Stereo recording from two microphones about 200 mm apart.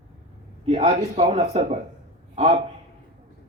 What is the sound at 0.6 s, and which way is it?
A man's voice, 30° right (ahead or behind).